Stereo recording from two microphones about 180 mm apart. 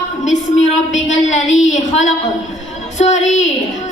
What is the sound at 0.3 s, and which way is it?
A woman's voice, 40° left (ahead or behind).